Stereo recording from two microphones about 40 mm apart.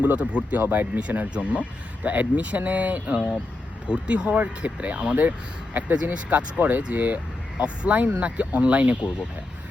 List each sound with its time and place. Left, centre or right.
0.0 s speech: right
0.6 s speech: right
0.9 s speech: right
3.8 s speech: right
4.3 s speech: right